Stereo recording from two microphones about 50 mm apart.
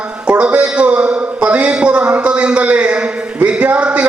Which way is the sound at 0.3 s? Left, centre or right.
Right.